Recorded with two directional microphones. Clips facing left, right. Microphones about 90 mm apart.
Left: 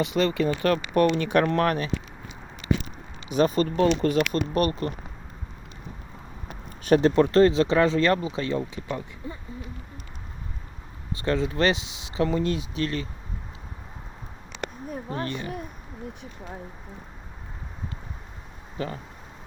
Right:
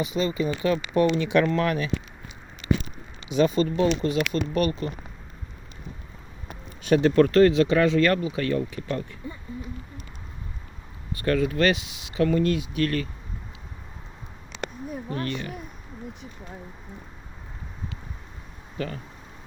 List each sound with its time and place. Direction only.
0.0 s speech: 75° left (ahead or behind); by 1.9 s 45° left (ahead or behind)
3.2 s speech: 40° left (ahead or behind)
6.8 s speech: 40° left (ahead or behind)
7.2 s speech: 30° left (ahead or behind)
11.1 s speech: 25° left (ahead or behind)
14.8 s speech: 30° left (ahead or behind)
18.8 s speech: 25° left (ahead or behind)